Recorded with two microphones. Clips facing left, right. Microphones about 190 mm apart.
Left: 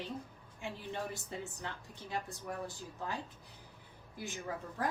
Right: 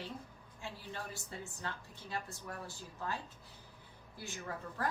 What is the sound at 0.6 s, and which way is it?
Speech, 20° left (ahead or behind).